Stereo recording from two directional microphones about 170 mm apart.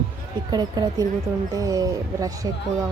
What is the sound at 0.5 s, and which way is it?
Speech, 25° right (ahead or behind).